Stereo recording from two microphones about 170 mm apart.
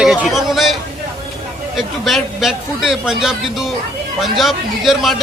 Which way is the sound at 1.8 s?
Centre (ahead or behind).